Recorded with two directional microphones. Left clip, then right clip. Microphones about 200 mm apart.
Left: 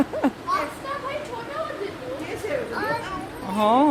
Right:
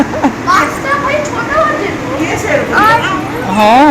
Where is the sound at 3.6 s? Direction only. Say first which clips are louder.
Right 12 dB; 20° left (ahead or behind).